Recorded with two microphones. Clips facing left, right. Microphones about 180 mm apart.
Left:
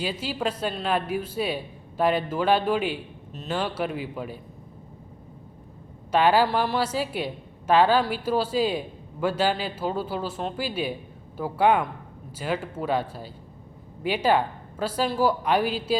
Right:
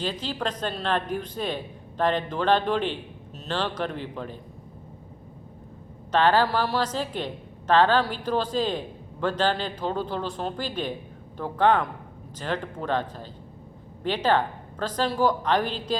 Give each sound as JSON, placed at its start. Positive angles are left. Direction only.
{"t": 0.0, "sound": "speech", "side_deg": 10}
{"t": 6.1, "sound": "speech", "side_deg": 10}